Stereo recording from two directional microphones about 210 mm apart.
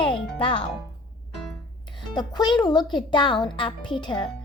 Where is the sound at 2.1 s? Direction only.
20° left (ahead or behind).